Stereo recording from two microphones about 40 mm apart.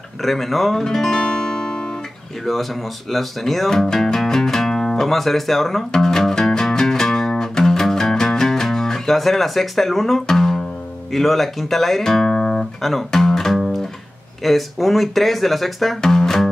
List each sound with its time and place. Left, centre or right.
0.2 s speech: centre
0.8 s music: centre
2.4 s speech: centre
3.7 s music: centre
11.1 s speech: centre
12.8 s music: centre
14.4 s speech: centre